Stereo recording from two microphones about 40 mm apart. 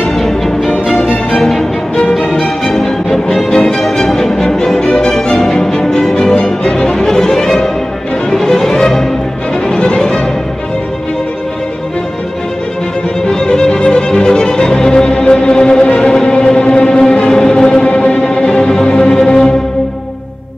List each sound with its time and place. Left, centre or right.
0.2 s music: centre
6.3 s music: left
9.7 s music: left
13.3 s violin: centre
16.2 s music: centre